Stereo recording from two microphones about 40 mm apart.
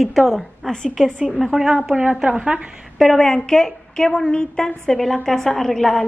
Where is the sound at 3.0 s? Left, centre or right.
Centre.